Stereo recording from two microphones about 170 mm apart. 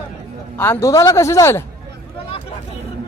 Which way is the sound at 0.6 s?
15° left (ahead or behind).